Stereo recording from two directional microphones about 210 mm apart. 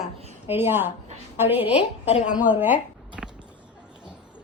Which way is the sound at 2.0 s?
30° left (ahead or behind).